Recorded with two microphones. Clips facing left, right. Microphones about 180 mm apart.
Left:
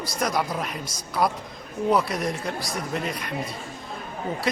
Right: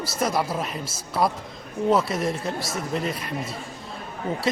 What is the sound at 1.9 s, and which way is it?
A man's voice, centre (ahead or behind).